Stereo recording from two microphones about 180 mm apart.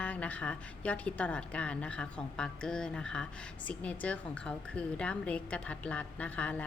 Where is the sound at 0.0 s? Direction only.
5° left (ahead or behind).